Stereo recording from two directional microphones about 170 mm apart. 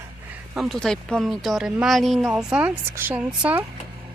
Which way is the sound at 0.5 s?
Centre (ahead or behind).